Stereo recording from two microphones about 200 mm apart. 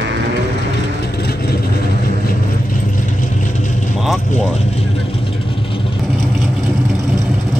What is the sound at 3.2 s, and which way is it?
Vehicle, 40° left (ahead or behind).